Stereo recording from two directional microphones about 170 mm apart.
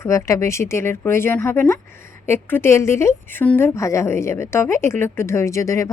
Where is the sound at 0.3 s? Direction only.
15° left (ahead or behind).